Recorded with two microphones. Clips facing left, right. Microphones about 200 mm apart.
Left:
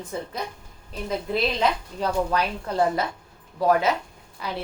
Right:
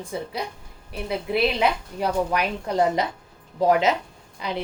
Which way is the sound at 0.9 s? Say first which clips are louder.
Right 1 dB; 10° right (ahead or behind).